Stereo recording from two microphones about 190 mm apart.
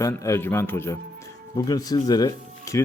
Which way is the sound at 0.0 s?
15° left (ahead or behind).